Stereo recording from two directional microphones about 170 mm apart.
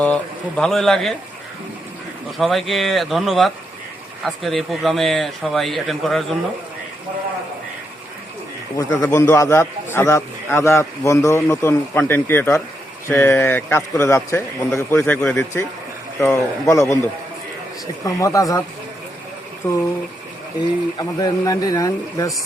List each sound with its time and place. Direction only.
0.0 s speech: 5° left (ahead or behind)
2.4 s speech: centre (ahead or behind)
8.9 s a man's voice: 15° left (ahead or behind)
18.0 s a man's voice: 20° left (ahead or behind)
19.6 s a man's voice: 10° left (ahead or behind)
21.0 s a man's voice: 20° left (ahead or behind)